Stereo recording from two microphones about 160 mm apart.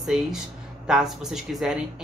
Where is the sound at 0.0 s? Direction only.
Centre (ahead or behind).